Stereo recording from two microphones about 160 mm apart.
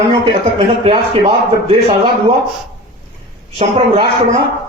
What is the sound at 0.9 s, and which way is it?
A man's voice, 40° right (ahead or behind).